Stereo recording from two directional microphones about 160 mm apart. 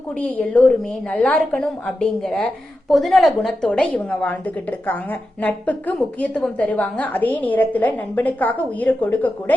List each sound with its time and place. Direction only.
0.2 s a woman's voice: 10° left (ahead or behind)
5.4 s a woman's voice: 10° left (ahead or behind)